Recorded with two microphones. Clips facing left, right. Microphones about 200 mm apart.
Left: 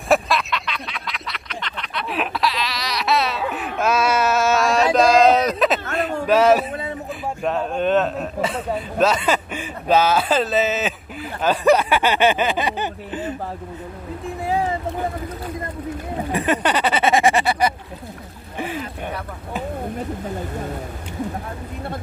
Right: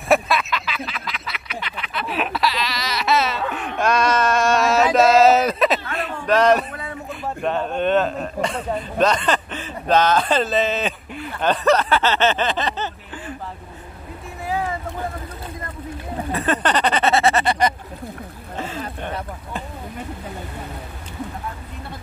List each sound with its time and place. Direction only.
0.1 s duck: centre (ahead or behind)
6.2 s speech: 5° left (ahead or behind)
6.7 s a sound: 25° left (ahead or behind)
7.4 s a man's voice: centre (ahead or behind); by 13.3 s 15° left (ahead or behind)
14.4 s boat: 25° left (ahead or behind)
16.3 s speech: 15° left (ahead or behind)
18.6 s a sound: 15° left (ahead or behind)